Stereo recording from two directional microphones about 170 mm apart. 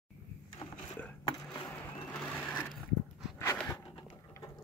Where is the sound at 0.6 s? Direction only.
30° left (ahead or behind).